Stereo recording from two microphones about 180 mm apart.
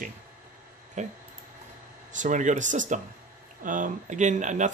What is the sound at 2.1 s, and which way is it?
Speech, 45° right (ahead or behind).